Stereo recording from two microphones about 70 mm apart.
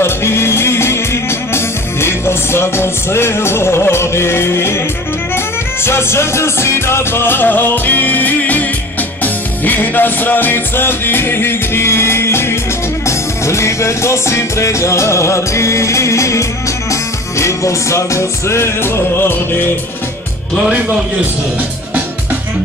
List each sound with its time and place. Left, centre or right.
0.0 s music: left